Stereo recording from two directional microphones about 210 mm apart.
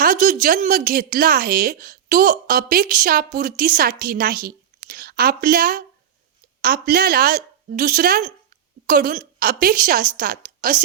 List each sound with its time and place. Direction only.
0.0 s a woman's voice: 40° right (ahead or behind)